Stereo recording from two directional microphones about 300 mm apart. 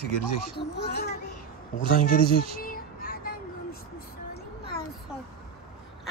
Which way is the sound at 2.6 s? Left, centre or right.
Left.